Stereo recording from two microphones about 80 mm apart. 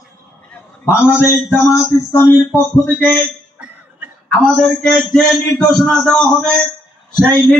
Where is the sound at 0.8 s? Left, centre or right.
Left.